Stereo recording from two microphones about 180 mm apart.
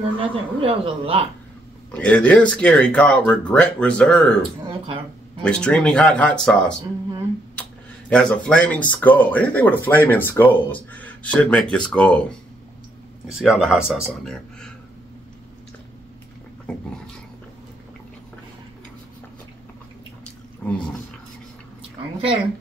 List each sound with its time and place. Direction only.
0.2 s speech: 30° right (ahead or behind)
1.9 s speech: 5° left (ahead or behind)
4.4 s speech: 30° right (ahead or behind)
5.4 s speech: 5° left (ahead or behind)
8.1 s speech: 5° left (ahead or behind)
13.3 s speech: centre (ahead or behind)